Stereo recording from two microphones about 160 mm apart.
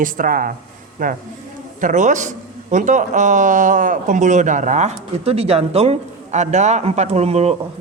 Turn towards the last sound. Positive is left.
turn(degrees=-40)  # may be behind; listen again after turning